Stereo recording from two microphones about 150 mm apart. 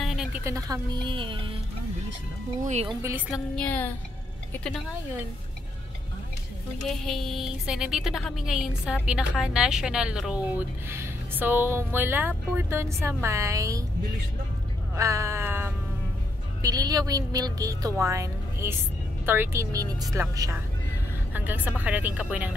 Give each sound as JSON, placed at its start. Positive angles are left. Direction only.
{"t": 0.0, "sound": "a sound", "side_deg": 0}
{"t": 0.4, "sound": "a woman's voice", "side_deg": -20}
{"t": 2.6, "sound": "speech", "side_deg": -50}
{"t": 3.0, "sound": "a woman's voice", "side_deg": -20}
{"t": 3.5, "sound": "a woman's voice", "side_deg": 10}
{"t": 6.9, "sound": "a woman's voice", "side_deg": 0}
{"t": 15.0, "sound": "a woman's voice", "side_deg": -20}
{"t": 16.6, "sound": "a woman's voice", "side_deg": -25}